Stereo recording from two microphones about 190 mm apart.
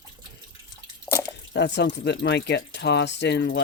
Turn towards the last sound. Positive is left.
turn(degrees=65)  # may be behind; listen again after turning